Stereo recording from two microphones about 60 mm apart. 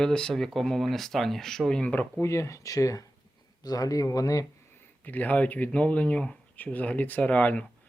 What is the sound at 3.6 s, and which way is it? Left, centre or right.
Speech, left.